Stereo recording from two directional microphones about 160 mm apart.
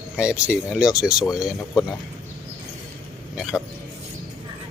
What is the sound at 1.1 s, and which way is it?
Speech, 25° left (ahead or behind).